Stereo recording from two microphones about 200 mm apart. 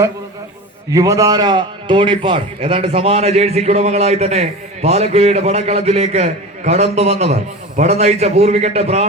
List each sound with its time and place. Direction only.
0.9 s a man's voice: 15° right (ahead or behind); by 9.0 s 30° right (ahead or behind)